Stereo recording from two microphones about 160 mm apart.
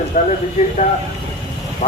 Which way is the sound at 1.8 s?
45° left (ahead or behind).